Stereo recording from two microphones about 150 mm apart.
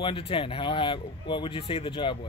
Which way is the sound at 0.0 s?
35° left (ahead or behind).